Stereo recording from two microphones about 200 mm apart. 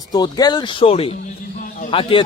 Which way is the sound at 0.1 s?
20° left (ahead or behind).